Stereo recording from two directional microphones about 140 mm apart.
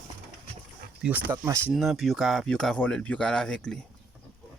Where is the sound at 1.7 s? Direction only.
Centre (ahead or behind).